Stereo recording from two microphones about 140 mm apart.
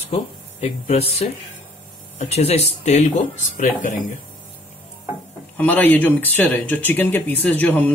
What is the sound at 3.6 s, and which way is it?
Speech, 70° left (ahead or behind).